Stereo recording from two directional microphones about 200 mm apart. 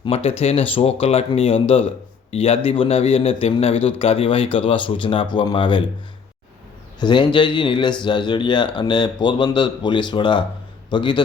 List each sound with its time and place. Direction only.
0.0 s speech: 30° left (ahead or behind)
7.0 s speech: 25° left (ahead or behind)